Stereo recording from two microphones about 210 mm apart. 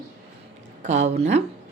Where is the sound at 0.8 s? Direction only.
35° right (ahead or behind).